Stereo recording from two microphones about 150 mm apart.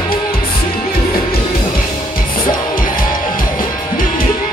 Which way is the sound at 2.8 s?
70° left (ahead or behind).